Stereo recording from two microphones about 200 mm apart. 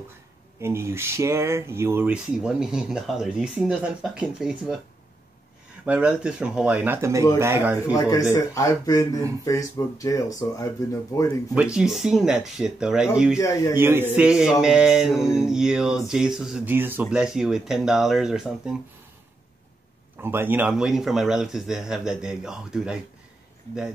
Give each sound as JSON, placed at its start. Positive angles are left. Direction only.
{"t": 0.6, "sound": "speech", "side_deg": -15}
{"t": 5.9, "sound": "speech", "side_deg": -5}
{"t": 7.9, "sound": "speech", "side_deg": 15}
{"t": 11.5, "sound": "speech", "side_deg": -5}
{"t": 13.4, "sound": "speech", "side_deg": 15}
{"t": 13.7, "sound": "speech", "side_deg": -10}
{"t": 20.2, "sound": "speech", "side_deg": -10}